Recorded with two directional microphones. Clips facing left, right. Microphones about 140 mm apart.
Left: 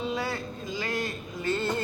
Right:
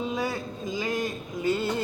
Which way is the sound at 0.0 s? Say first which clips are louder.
Right 1 dB; 15° right (ahead or behind).